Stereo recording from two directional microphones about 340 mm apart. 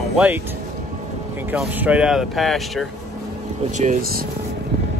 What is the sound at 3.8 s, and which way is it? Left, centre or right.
Speech, right.